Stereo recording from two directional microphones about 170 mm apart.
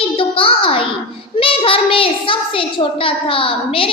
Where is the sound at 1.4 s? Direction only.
35° left (ahead or behind).